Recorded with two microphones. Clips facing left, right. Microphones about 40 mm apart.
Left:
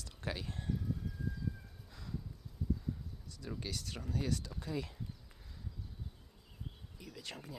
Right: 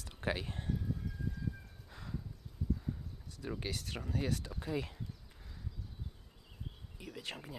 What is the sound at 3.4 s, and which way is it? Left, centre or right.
Speech, right.